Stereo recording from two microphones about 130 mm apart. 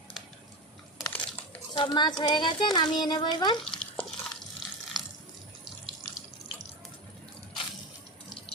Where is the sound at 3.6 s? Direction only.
5° left (ahead or behind).